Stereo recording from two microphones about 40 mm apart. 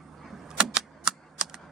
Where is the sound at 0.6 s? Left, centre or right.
Centre.